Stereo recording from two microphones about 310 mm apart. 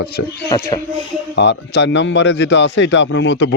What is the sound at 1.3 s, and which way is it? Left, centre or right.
A man's voice, left.